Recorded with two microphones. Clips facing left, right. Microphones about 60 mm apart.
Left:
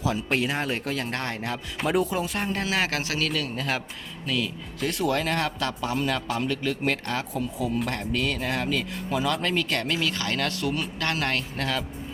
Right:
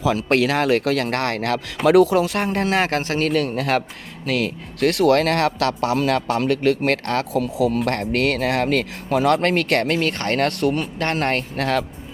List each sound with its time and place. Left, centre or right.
0.2 s speech: right
7.9 s speech: right
10.9 s speech: right